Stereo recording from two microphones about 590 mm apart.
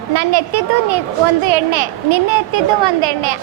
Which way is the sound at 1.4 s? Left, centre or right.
Right.